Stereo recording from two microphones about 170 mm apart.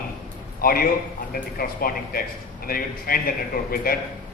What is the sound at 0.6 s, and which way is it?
A man's voice, 60° left (ahead or behind).